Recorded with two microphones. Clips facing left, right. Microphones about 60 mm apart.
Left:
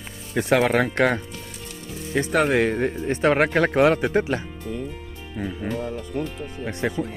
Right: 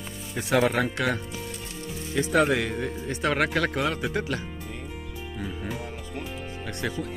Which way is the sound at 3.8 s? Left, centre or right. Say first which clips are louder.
Left 9 dB; left.